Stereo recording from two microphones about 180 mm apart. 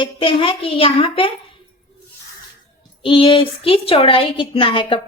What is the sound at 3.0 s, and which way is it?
A woman's voice, 30° left (ahead or behind).